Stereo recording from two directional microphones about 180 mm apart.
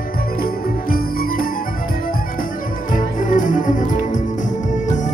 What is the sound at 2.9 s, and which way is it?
Music, 45° left (ahead or behind).